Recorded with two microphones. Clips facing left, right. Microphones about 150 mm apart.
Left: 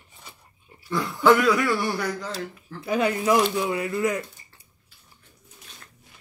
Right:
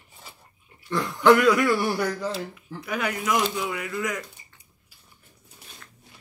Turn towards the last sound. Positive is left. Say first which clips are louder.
# left 4 dB
turn(degrees=30)  # may be behind; listen again after turning